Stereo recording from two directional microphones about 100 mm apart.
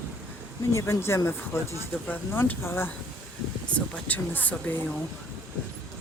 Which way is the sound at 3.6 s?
10° left (ahead or behind).